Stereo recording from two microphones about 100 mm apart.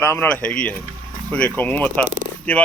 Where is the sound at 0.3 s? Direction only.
10° left (ahead or behind).